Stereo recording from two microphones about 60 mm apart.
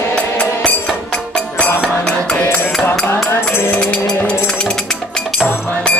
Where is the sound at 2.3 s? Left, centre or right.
Left.